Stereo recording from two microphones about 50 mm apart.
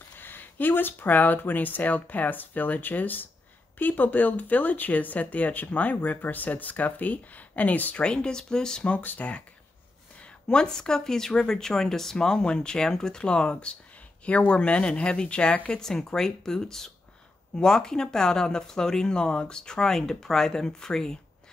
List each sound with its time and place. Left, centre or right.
0.2 s speech: left
8.0 s speech: centre
8.9 s speech: left
10.2 s speech: centre
15.8 s speech: centre